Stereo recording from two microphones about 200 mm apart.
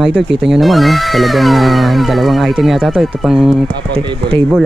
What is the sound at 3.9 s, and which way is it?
Speech, 25° right (ahead or behind).